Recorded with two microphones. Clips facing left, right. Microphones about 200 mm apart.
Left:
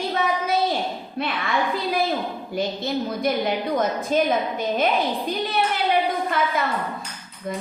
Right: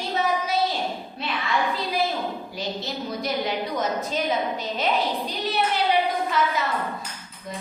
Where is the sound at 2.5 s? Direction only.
55° left (ahead or behind).